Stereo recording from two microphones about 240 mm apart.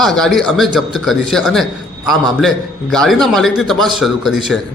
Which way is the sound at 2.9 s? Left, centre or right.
Centre.